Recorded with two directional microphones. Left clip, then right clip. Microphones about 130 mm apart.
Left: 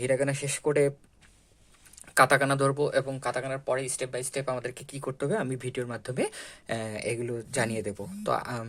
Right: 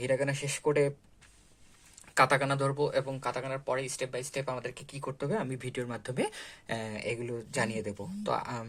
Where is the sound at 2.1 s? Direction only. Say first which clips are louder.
Left 4 dB; 40° left (ahead or behind).